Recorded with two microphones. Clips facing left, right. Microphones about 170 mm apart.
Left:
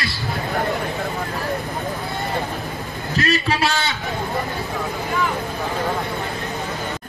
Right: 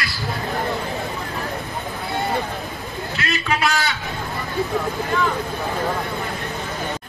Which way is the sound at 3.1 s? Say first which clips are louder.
Left 4 dB; 35° left (ahead or behind).